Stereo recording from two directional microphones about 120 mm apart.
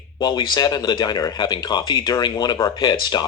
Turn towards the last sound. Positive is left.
turn(degrees=35)  # may be behind; listen again after turning